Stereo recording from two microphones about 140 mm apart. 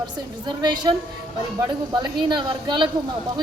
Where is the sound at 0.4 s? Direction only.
30° right (ahead or behind).